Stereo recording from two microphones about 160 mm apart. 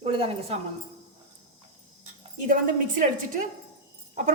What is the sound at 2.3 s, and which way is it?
Speech, 55° right (ahead or behind).